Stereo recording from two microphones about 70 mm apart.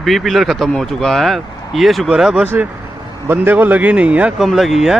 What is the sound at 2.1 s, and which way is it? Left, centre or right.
Speech, centre.